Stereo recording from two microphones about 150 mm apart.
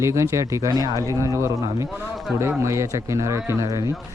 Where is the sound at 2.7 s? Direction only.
20° right (ahead or behind).